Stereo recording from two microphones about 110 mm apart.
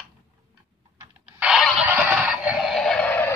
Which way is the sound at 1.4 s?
5° right (ahead or behind).